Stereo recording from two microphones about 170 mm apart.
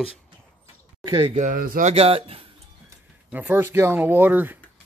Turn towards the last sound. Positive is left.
turn(degrees=-10)  # may be behind; listen again after turning